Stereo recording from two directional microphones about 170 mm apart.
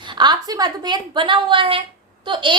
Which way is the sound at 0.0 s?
25° right (ahead or behind).